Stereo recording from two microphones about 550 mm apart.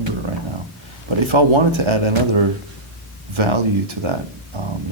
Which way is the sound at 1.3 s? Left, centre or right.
Right.